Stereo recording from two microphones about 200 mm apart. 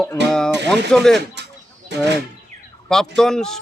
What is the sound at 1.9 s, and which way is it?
Speech, 60° right (ahead or behind).